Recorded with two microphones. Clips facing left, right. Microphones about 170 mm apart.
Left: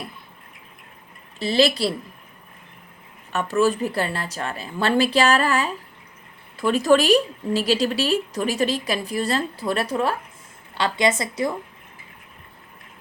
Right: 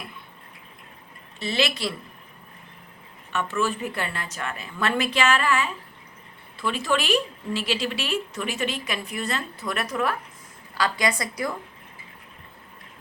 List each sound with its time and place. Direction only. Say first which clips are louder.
1.4 s a woman's voice: left 7 dB; 35° left (ahead or behind)
3.3 s a woman's voice: left 6 dB; 40° left (ahead or behind)